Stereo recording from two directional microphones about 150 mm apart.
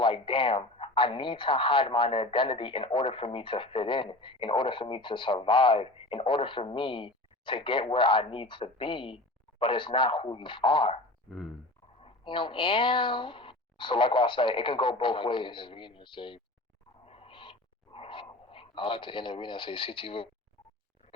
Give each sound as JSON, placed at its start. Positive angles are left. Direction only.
{"t": 0.0, "sound": "speech", "side_deg": 35}
{"t": 11.3, "sound": "a sound", "side_deg": 0}
{"t": 11.9, "sound": "speech", "side_deg": 35}
{"t": 17.1, "sound": "owl", "side_deg": 40}